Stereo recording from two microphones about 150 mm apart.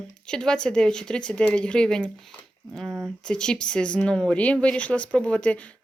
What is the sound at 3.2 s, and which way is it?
Speech, 5° left (ahead or behind).